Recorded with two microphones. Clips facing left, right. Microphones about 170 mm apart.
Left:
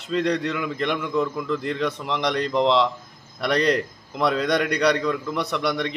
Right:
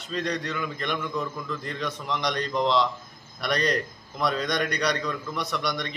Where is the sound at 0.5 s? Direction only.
90° left.